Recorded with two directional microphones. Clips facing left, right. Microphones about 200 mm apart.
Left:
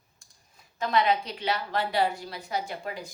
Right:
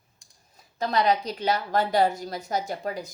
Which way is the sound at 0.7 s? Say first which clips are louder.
Right 2 dB; 40° right (ahead or behind).